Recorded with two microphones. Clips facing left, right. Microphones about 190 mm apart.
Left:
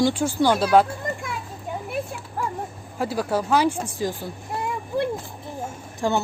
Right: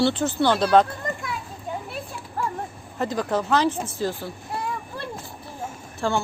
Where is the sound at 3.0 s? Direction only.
10° left (ahead or behind).